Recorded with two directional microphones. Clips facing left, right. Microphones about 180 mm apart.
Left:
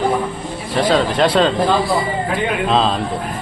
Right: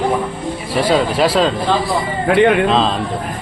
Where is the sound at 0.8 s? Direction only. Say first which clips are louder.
Even; 10° right (ahead or behind).